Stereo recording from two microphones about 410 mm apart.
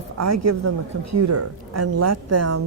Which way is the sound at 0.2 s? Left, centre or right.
Right.